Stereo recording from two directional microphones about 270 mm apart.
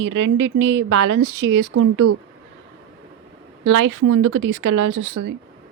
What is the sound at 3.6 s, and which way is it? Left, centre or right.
Speech, right.